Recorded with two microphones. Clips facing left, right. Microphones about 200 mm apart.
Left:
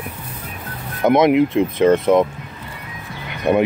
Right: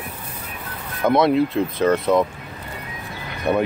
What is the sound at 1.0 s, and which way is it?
Speech, 20° left (ahead or behind).